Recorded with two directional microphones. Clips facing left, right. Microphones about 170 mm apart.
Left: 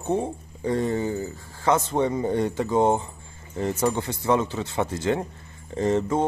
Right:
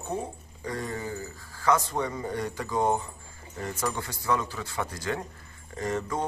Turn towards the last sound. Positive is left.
turn(degrees=25)  # may be behind; listen again after turning